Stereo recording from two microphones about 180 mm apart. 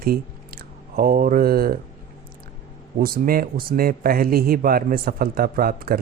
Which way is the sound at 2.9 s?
55° right (ahead or behind).